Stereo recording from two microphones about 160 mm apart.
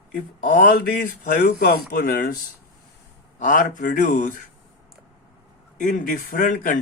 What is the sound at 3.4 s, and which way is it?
Speech, 55° left (ahead or behind).